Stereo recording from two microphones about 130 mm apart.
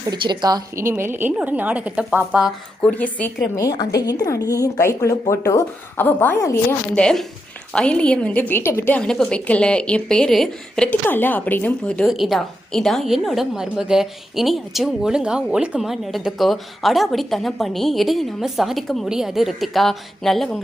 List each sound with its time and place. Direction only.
0.1 s a woman's voice: 35° right (ahead or behind)
0.9 s a woman's voice: 20° right (ahead or behind)
2.8 s a woman's voice: 10° left (ahead or behind)
3.6 s speech: 30° left (ahead or behind)
6.0 s a woman's voice: 15° left (ahead or behind)
6.9 s a woman's voice: 5° left (ahead or behind)
11.0 s a woman's voice: 15° left (ahead or behind)
12.0 s a woman's voice: centre (ahead or behind)